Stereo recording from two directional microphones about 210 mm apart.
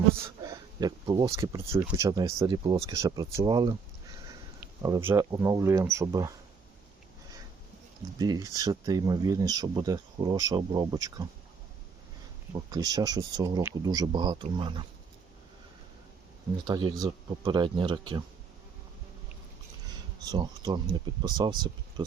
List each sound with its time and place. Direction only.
0.4 s speech: 20° right (ahead or behind)
8.2 s speech: 15° right (ahead or behind)
12.5 s speech: 20° right (ahead or behind)
16.6 s speech: 20° right (ahead or behind)
20.2 s speech: 20° right (ahead or behind)